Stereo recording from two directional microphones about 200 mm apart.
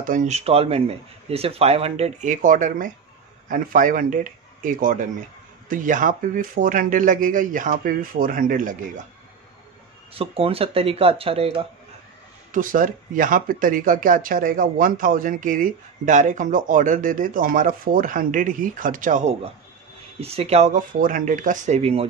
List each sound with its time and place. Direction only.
0.0 s speech: 40° right (ahead or behind)
10.1 s speech: 30° right (ahead or behind)
12.5 s speech: 40° right (ahead or behind)